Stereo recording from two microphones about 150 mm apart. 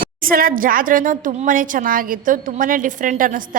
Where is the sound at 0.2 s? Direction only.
70° right (ahead or behind).